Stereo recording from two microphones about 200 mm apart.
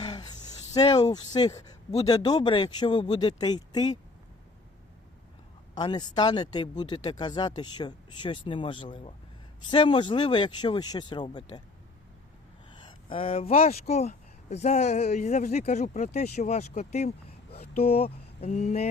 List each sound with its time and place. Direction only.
0.0 s a sound: 20° left (ahead or behind)
2.0 s speech: 20° left (ahead or behind)
5.7 s speech: 20° left (ahead or behind)
12.7 s speech: 25° left (ahead or behind)